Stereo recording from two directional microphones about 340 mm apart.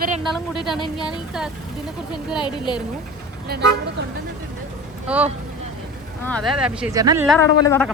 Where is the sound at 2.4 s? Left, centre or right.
Centre.